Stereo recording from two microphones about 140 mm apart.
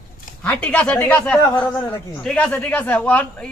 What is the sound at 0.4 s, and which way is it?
Speech, 10° left (ahead or behind).